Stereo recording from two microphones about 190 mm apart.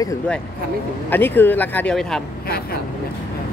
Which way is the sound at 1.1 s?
10° left (ahead or behind).